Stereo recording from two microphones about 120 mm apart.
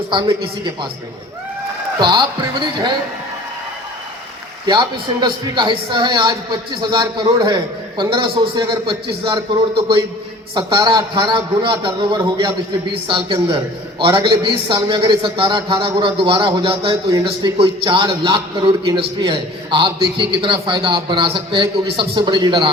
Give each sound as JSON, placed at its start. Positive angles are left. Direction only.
{"t": 0.1, "sound": "a man's voice", "side_deg": -40}
{"t": 2.0, "sound": "a man's voice", "side_deg": -40}
{"t": 4.6, "sound": "a man's voice", "side_deg": -40}
{"t": 16.9, "sound": "a man's voice", "side_deg": -30}
{"t": 17.6, "sound": "a man's voice", "side_deg": -45}